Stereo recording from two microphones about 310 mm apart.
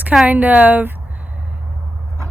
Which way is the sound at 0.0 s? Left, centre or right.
Centre.